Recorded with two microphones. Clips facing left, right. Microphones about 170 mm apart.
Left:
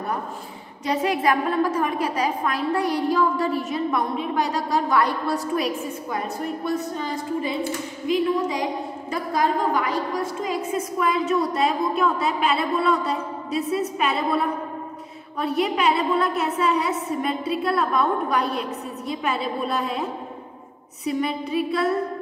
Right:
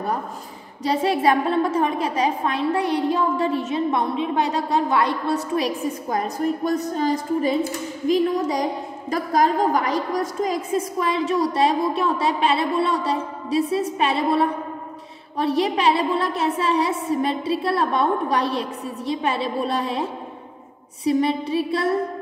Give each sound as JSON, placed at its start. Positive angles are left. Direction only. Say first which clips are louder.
{"t": 0.8, "sound": "a woman's voice", "louder": "right 2 dB", "side_deg": -30}
{"t": 6.0, "sound": "a woman's voice", "louder": "right 6 dB", "side_deg": -40}
{"t": 11.0, "sound": "a woman's voice", "louder": "left 1 dB", "side_deg": -30}